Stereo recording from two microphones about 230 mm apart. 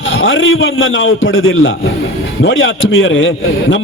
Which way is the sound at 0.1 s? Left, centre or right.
Left.